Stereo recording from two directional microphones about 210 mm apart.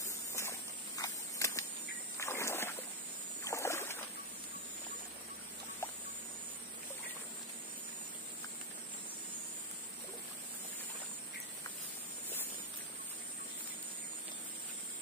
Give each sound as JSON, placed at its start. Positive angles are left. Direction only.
{"t": 0.0, "sound": "a sound", "side_deg": 15}
{"t": 2.1, "sound": "splash", "side_deg": 15}
{"t": 3.4, "sound": "rowboat", "side_deg": 15}